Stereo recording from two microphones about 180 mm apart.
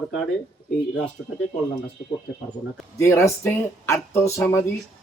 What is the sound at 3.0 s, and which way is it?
Speech, 15° left (ahead or behind).